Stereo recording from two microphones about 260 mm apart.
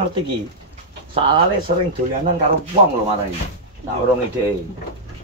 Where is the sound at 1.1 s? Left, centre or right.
Centre.